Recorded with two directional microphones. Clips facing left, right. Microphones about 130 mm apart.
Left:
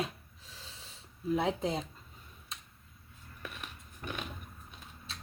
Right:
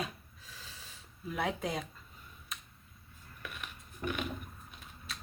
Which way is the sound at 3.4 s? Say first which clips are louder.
Left 1 dB; 35° left (ahead or behind).